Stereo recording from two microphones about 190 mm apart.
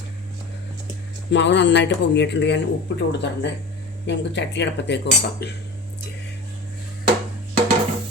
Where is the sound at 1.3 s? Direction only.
65° left (ahead or behind).